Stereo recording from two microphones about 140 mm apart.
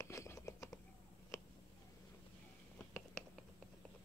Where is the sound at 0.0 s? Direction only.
20° left (ahead or behind).